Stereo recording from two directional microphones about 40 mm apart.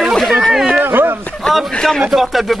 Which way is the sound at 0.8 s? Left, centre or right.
Right.